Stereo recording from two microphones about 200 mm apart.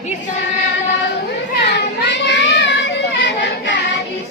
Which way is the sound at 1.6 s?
60° left (ahead or behind).